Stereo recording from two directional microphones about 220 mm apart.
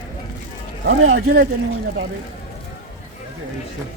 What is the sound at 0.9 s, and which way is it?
Speech, 70° right (ahead or behind).